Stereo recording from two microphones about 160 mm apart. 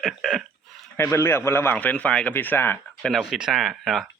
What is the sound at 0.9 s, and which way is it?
Speech, 15° left (ahead or behind).